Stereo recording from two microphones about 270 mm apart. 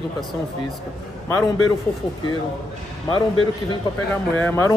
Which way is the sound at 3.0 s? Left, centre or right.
Centre.